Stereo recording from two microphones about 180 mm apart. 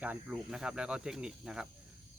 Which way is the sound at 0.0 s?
5° right (ahead or behind).